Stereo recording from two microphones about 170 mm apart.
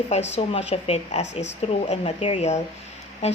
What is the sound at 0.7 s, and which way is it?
A woman's voice, 40° left (ahead or behind).